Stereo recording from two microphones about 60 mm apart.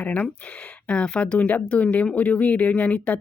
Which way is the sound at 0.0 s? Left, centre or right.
Left.